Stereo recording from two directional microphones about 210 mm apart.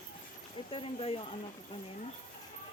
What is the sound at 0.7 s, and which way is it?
Speech, 25° left (ahead or behind).